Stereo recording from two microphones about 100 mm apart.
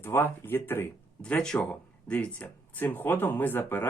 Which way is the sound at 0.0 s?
20° left (ahead or behind).